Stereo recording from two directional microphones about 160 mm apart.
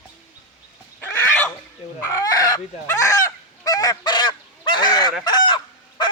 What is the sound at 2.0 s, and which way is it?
Goose, 20° left (ahead or behind).